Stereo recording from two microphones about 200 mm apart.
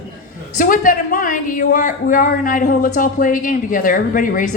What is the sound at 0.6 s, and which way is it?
Speech, 40° left (ahead or behind).